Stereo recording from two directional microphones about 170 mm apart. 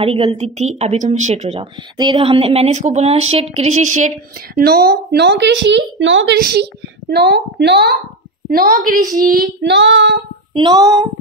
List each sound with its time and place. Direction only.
0.0 s a woman's voice: 35° right (ahead or behind)
2.0 s a woman's voice: 30° right (ahead or behind); by 4.1 s 45° right (ahead or behind)
4.6 s a woman's voice: 65° right (ahead or behind)
8.5 s a woman's voice: 60° right (ahead or behind)
9.6 s child singing: 90° right
10.5 s speech: 25° right (ahead or behind)